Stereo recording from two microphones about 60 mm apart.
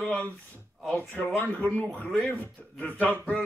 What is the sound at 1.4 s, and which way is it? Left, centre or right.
Speech, left.